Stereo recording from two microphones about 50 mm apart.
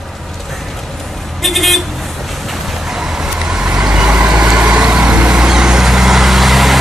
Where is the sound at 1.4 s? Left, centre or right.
Centre.